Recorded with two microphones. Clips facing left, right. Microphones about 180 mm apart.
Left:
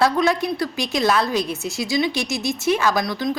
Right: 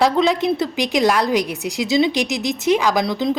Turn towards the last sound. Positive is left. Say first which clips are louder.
# right 3 dB
turn(degrees=-20)  # may be behind; listen again after turning